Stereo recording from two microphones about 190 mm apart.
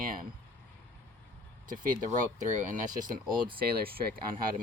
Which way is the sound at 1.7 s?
45° right (ahead or behind).